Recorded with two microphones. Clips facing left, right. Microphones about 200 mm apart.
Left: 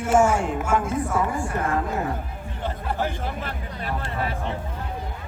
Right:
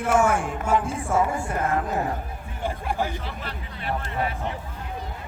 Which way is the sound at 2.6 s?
10° right (ahead or behind).